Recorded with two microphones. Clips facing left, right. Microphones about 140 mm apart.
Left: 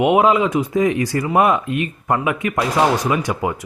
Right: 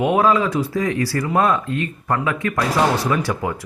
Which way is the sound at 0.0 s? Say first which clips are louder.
Left 2 dB; 20° left (ahead or behind).